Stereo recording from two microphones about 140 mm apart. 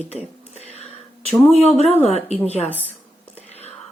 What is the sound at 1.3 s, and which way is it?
Speech, 50° left (ahead or behind).